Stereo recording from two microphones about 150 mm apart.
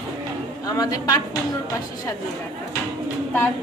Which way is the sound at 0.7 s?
25° left (ahead or behind).